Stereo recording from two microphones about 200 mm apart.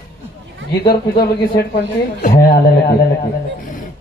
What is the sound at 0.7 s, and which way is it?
Speech, 50° left (ahead or behind).